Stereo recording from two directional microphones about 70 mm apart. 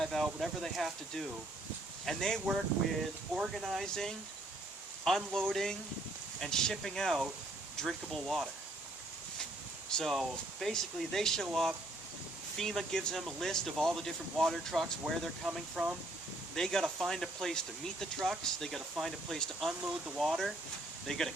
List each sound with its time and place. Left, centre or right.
0.2 s speech: centre
9.9 s speech: centre
12.5 s speech: centre
15.7 s speech: centre
16.6 s speech: centre